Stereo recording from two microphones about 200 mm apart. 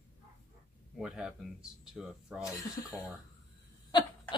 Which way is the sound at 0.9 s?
5° right (ahead or behind).